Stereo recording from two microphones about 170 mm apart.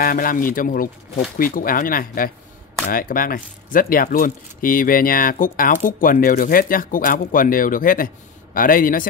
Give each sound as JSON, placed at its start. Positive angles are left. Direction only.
{"t": 0.0, "sound": "speech", "side_deg": 55}